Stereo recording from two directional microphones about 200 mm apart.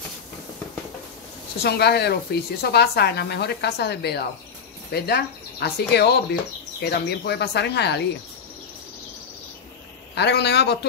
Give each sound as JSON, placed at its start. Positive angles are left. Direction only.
{"t": 1.6, "sound": "speech", "side_deg": 55}
{"t": 10.1, "sound": "speech", "side_deg": 60}